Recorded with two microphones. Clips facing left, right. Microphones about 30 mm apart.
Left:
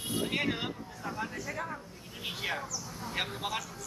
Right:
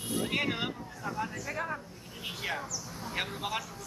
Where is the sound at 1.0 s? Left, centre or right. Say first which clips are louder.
Right 2 dB; centre.